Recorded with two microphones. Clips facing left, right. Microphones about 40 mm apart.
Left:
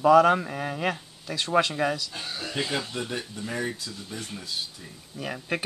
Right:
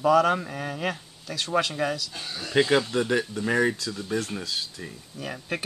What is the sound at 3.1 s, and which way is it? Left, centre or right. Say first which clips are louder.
Speech: right 8 dB; right.